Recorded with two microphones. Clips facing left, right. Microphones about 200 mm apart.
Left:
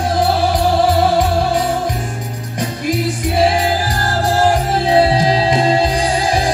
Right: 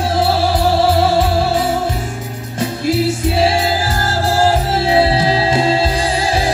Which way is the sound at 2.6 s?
15° left (ahead or behind).